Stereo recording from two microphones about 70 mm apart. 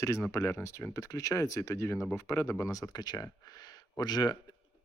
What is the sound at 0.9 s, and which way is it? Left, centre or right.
Speech, left.